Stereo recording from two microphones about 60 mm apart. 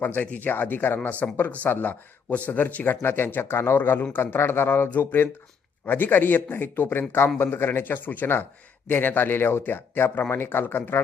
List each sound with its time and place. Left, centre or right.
0.0 s speech: left